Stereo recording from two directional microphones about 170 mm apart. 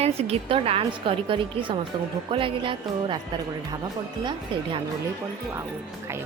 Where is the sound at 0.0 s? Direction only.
35° right (ahead or behind).